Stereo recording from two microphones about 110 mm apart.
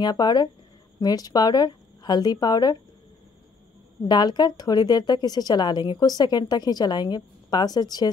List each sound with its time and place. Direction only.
0.0 s speech: 40° left (ahead or behind)
4.1 s speech: 40° left (ahead or behind)